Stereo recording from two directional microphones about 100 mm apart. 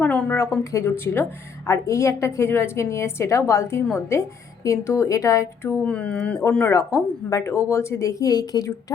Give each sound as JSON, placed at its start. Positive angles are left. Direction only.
{"t": 0.0, "sound": "a sound", "side_deg": 15}
{"t": 0.3, "sound": "a woman's voice", "side_deg": 30}
{"t": 5.8, "sound": "speech", "side_deg": 10}
{"t": 6.7, "sound": "a woman's voice", "side_deg": 30}